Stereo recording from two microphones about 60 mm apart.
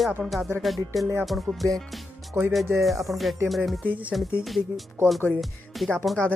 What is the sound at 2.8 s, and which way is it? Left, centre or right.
Music, centre.